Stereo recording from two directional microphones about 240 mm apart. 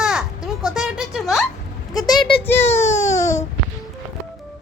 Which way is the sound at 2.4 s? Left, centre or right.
Centre.